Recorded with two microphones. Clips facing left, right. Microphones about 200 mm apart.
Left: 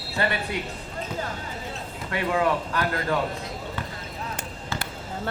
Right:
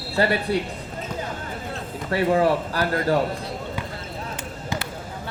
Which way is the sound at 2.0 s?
35° right (ahead or behind).